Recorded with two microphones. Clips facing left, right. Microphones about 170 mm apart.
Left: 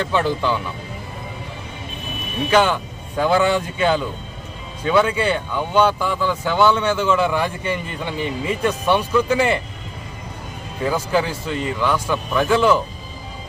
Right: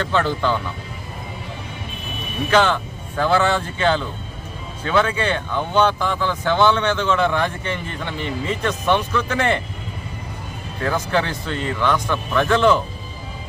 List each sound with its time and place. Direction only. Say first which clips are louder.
0.0 s speech: even; 10° left (ahead or behind)
2.5 s speech: even; 10° left (ahead or behind)
10.8 s speech: left 1 dB; 10° left (ahead or behind)